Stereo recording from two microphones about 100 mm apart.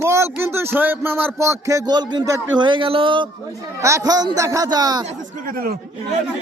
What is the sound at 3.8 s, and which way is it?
Speech, 35° right (ahead or behind).